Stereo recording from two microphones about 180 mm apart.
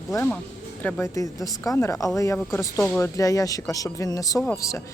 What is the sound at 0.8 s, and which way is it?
Speech, 10° left (ahead or behind).